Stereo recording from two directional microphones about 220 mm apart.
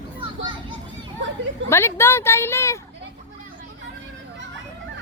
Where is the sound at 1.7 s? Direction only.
10° left (ahead or behind).